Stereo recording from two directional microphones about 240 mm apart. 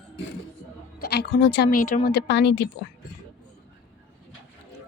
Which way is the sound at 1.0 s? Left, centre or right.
Left.